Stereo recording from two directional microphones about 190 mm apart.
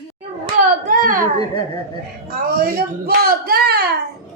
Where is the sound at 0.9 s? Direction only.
45° right (ahead or behind).